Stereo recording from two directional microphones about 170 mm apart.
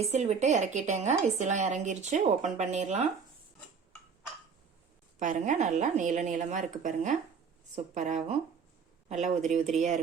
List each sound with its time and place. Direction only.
0.0 s a woman's voice: 40° right (ahead or behind)
5.2 s a woman's voice: 45° right (ahead or behind)